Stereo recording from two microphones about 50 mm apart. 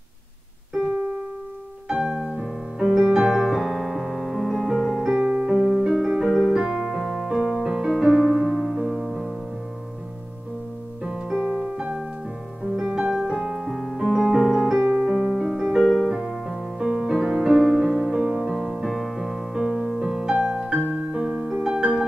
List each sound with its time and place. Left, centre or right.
1.9 s piano: centre
6.5 s music: centre
11.1 s music: centre
12.7 s piano: centre
15.0 s music: centre